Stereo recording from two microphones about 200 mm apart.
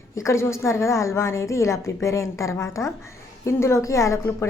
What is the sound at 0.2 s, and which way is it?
A woman's voice, 15° left (ahead or behind).